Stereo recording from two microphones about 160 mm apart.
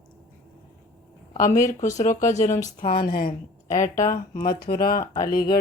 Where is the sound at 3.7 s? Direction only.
50° left (ahead or behind).